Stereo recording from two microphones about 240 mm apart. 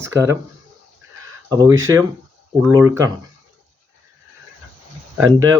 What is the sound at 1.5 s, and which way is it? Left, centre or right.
Speech, centre.